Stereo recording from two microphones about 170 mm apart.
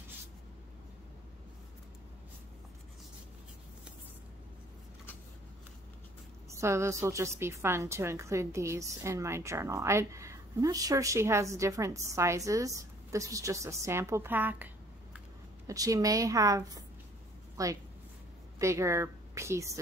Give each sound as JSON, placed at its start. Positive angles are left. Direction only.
{"t": 6.5, "sound": "a woman's voice", "side_deg": -15}